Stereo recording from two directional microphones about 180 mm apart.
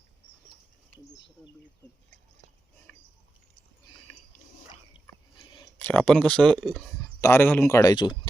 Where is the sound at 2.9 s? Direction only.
5° left (ahead or behind).